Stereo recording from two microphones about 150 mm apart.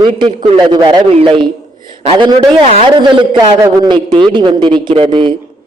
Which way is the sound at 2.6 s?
50° right (ahead or behind).